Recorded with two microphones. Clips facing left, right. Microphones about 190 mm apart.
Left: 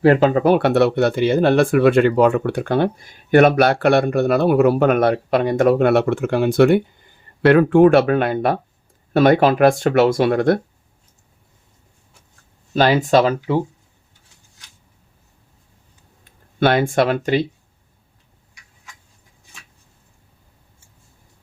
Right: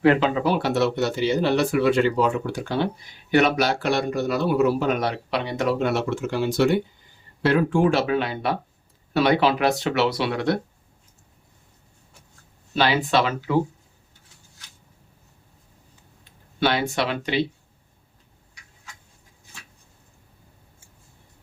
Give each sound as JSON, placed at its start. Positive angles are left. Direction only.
{"t": 0.0, "sound": "speech", "side_deg": 45}
{"t": 12.7, "sound": "speech", "side_deg": 45}
{"t": 16.6, "sound": "speech", "side_deg": 50}